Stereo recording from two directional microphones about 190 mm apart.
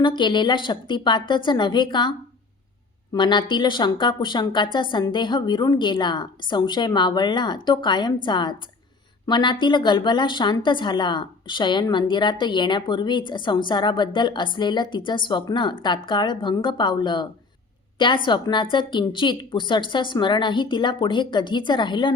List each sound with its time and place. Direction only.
0.0 s a woman's voice: 25° left (ahead or behind)
3.2 s a woman's voice: 25° left (ahead or behind)